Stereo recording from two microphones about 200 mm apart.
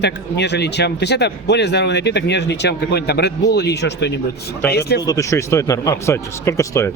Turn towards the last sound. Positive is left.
turn(degrees=15)  # may be behind; listen again after turning